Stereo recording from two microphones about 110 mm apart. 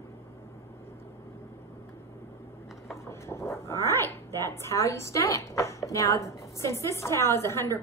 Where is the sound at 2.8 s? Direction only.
25° left (ahead or behind).